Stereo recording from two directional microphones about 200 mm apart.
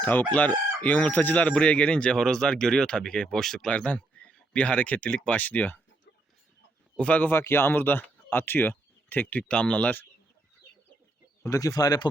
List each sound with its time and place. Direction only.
0.0 s chicken: 10° left (ahead or behind)
6.9 s speech: 5° left (ahead or behind)
11.4 s speech: 15° left (ahead or behind)